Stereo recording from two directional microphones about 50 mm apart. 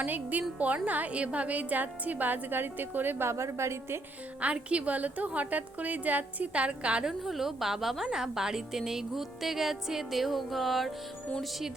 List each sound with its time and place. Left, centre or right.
0.0 s a woman's voice: right
3.2 s a woman's voice: right
4.4 s a woman's voice: right
7.1 s a woman's voice: centre